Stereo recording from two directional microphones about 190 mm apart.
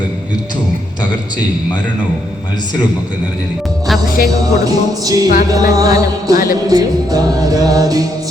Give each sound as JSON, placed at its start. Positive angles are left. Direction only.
{"t": 4.3, "sound": "music", "side_deg": -20}
{"t": 6.3, "sound": "music", "side_deg": 50}
{"t": 6.7, "sound": "music", "side_deg": -20}